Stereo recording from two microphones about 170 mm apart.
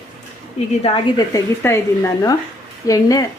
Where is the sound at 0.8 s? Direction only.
35° left (ahead or behind).